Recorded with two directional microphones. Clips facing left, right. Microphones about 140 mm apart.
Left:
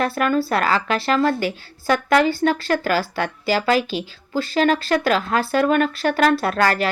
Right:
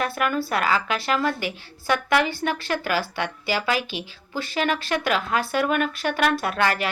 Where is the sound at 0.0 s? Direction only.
35° left (ahead or behind).